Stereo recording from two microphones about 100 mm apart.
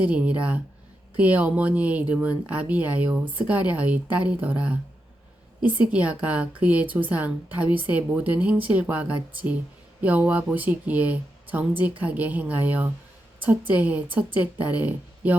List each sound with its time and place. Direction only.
0.0 s speech: 15° right (ahead or behind)